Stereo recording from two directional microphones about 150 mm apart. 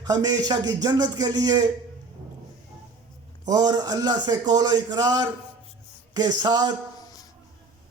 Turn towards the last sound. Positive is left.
turn(degrees=25)  # may be behind; listen again after turning